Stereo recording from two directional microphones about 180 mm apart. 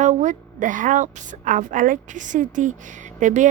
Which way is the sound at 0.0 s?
40° right (ahead or behind).